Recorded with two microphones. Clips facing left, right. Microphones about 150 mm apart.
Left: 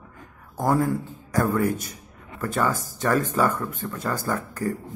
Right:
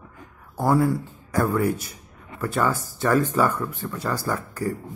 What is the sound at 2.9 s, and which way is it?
Speech, 45° left (ahead or behind).